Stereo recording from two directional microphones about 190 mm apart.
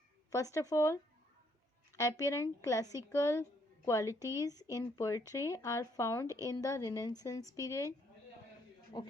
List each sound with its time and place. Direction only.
0.3 s speech: 15° left (ahead or behind)
2.0 s speech: 15° left (ahead or behind)
4.2 s speech: 15° right (ahead or behind)
4.7 s speech: 15° left (ahead or behind)
6.2 s speech: 15° right (ahead or behind)
6.5 s a woman's voice: 20° left (ahead or behind)
8.9 s a woman's voice: 20° left (ahead or behind)